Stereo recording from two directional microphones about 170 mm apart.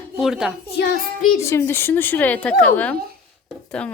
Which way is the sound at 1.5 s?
15° left (ahead or behind).